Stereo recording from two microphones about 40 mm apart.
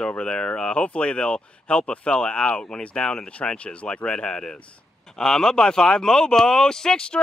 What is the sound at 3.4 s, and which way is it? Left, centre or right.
Speech, left.